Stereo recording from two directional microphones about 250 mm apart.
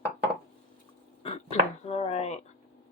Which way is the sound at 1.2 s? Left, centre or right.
Left.